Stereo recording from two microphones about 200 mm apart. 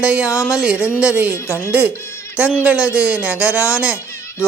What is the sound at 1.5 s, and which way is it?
Speech, 15° left (ahead or behind).